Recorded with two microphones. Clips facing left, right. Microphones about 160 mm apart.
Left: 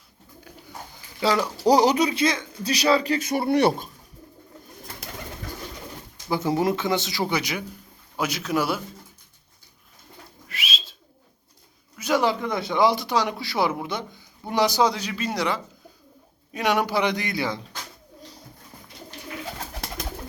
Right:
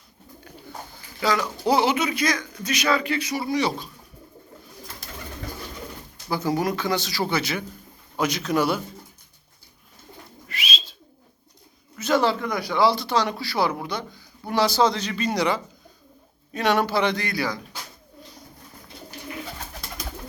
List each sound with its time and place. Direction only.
1.2 s speech: 30° left (ahead or behind); by 3.8 s 60° left (ahead or behind)
6.3 s a man's voice: 25° left (ahead or behind); by 8.8 s 5° left (ahead or behind)
10.5 s bird: centre (ahead or behind)
11.9 s a sound: 10° left (ahead or behind)
12.5 s a man's voice: 25° left (ahead or behind); by 15.6 s centre (ahead or behind)
16.5 s a man's voice: 10° left (ahead or behind)